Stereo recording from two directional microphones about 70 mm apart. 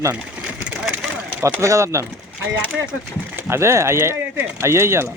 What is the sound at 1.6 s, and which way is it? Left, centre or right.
Speech, right.